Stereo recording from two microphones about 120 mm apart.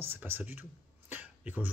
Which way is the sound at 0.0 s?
20° right (ahead or behind).